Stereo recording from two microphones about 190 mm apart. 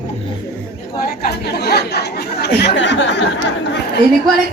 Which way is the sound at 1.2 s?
60° left (ahead or behind).